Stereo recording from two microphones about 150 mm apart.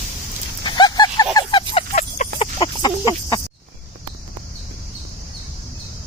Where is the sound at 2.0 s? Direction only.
50° left (ahead or behind).